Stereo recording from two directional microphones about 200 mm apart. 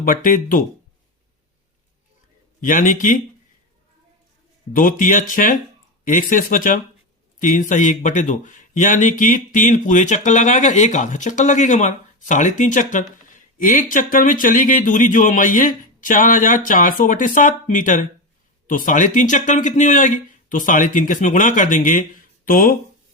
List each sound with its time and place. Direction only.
0.0 s speech: 45° left (ahead or behind)
2.6 s speech: 40° left (ahead or behind)
4.7 s speech: 40° left (ahead or behind)